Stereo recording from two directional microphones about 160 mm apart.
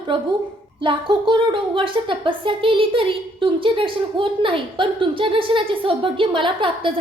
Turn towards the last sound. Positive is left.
turn(degrees=-30)  # may be behind; listen again after turning